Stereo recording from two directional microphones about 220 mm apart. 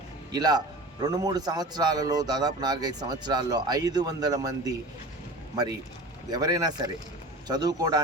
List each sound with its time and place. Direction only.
0.3 s a man's voice: 20° right (ahead or behind)
6.3 s a man's voice: 15° right (ahead or behind)